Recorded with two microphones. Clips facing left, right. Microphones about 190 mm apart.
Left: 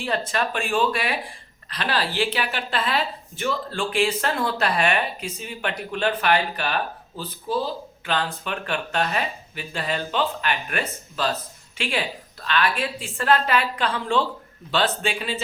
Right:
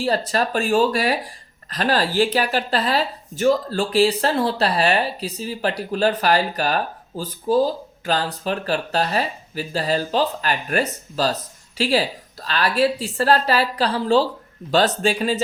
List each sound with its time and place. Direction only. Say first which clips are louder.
0.0 s speech: right 4 dB; 35° right (ahead or behind)